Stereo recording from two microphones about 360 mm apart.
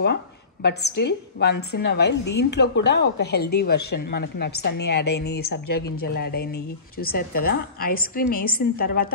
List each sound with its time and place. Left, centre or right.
0.0 s a woman's voice: left